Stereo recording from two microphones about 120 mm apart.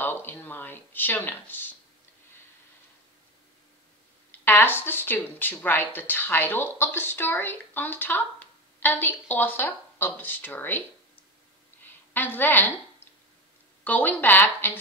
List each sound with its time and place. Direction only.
0.0 s speech: 15° left (ahead or behind)
4.3 s speech: 15° left (ahead or behind)
11.8 s a sound: 15° left (ahead or behind)
13.8 s speech: 15° left (ahead or behind)